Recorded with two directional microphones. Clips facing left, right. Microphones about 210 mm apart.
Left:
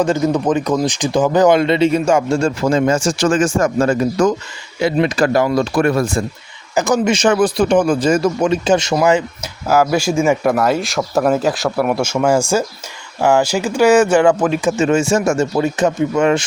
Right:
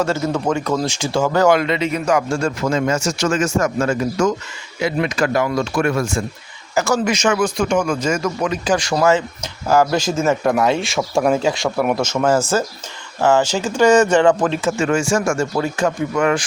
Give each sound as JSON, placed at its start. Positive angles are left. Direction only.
{"t": 0.0, "sound": "speech", "side_deg": 15}
{"t": 6.7, "sound": "speech", "side_deg": 20}
{"t": 7.1, "sound": "speech", "side_deg": 35}